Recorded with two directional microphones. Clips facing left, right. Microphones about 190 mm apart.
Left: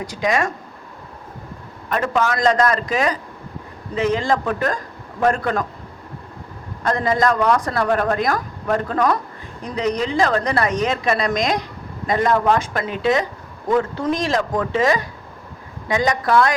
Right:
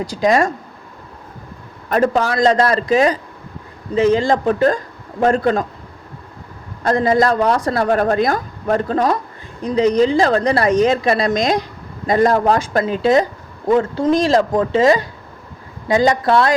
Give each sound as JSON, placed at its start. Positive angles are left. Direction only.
{"t": 0.0, "sound": "a woman's voice", "side_deg": -35}
{"t": 1.9, "sound": "a woman's voice", "side_deg": -35}
{"t": 6.8, "sound": "a woman's voice", "side_deg": -35}